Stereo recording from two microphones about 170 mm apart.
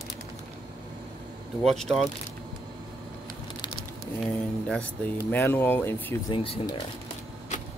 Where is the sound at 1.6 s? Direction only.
Centre (ahead or behind).